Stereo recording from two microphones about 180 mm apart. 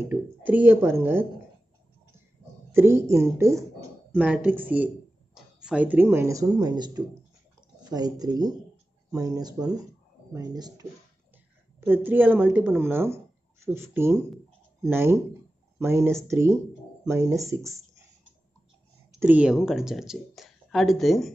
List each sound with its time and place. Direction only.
0.1 s speech: 10° right (ahead or behind)
2.7 s speech: 15° right (ahead or behind)
11.8 s speech: 10° right (ahead or behind)
19.1 s a woman's voice: 10° right (ahead or behind)